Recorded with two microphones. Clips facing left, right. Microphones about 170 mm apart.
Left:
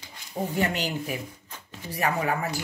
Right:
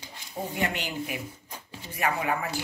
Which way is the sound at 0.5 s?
40° left (ahead or behind).